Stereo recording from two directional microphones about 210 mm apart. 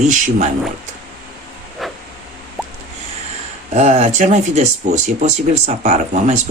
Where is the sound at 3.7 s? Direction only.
30° right (ahead or behind).